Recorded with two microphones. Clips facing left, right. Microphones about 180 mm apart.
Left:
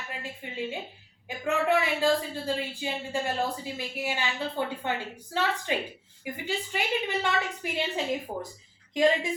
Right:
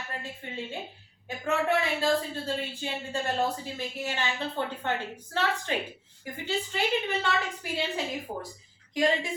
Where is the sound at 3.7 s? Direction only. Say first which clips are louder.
Left 1 dB; 10° left (ahead or behind).